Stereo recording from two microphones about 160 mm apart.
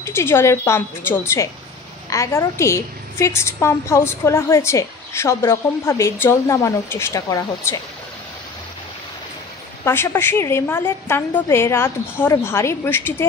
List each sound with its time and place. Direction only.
0.0 s a woman's voice: 15° left (ahead or behind)
9.8 s a woman's voice: 15° left (ahead or behind)